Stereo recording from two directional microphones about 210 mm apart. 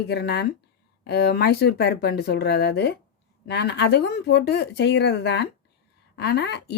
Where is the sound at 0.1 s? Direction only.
50° left (ahead or behind).